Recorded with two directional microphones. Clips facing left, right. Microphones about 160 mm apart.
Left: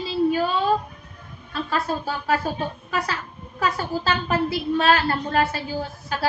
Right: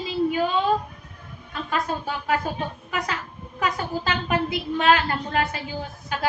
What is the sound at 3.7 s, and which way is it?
A woman's voice, 15° right (ahead or behind).